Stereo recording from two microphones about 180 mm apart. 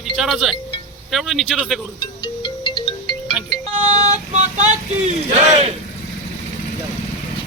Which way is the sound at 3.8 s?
35° right (ahead or behind).